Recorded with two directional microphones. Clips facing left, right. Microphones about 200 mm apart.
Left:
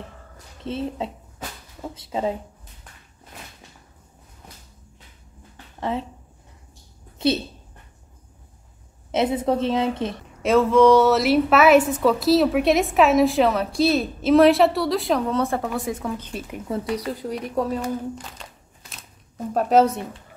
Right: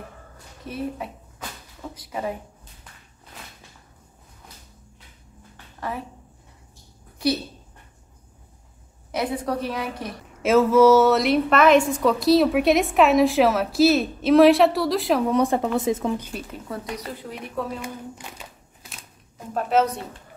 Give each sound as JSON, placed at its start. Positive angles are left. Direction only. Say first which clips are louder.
{"t": 0.7, "sound": "a woman's voice", "louder": "left 3 dB", "side_deg": 25}
{"t": 5.8, "sound": "a woman's voice", "louder": "left 5 dB", "side_deg": 25}
{"t": 7.2, "sound": "a woman's voice", "louder": "left 2 dB", "side_deg": 25}
{"t": 9.1, "sound": "a woman's voice", "louder": "left 5 dB", "side_deg": 20}
{"t": 10.4, "sound": "a woman's voice", "louder": "even", "side_deg": -5}
{"t": 15.2, "sound": "a woman's voice", "louder": "right 3 dB", "side_deg": -15}
{"t": 16.4, "sound": "a woman's voice", "louder": "left 5 dB", "side_deg": 20}
{"t": 16.9, "sound": "speech", "louder": "left 7 dB", "side_deg": 35}
{"t": 17.8, "sound": "a sound", "louder": "left 7 dB", "side_deg": -10}
{"t": 19.3, "sound": "a woman's voice", "louder": "left 4 dB", "side_deg": 40}